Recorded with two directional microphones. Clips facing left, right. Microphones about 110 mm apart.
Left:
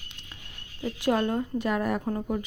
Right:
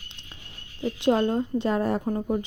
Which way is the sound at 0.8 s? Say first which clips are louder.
Right 3 dB; 25° right (ahead or behind).